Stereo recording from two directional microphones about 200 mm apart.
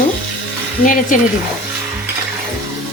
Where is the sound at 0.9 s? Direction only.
40° left (ahead or behind).